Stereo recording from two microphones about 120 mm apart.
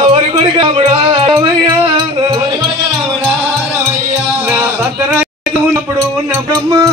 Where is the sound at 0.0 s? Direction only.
50° right (ahead or behind).